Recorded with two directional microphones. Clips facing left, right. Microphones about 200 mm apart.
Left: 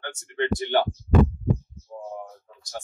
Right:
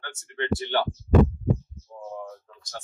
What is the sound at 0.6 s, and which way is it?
Speech, 15° left (ahead or behind).